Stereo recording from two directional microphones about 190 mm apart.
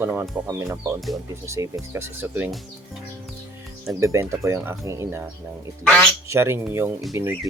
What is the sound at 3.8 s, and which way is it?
Speech, 15° right (ahead or behind).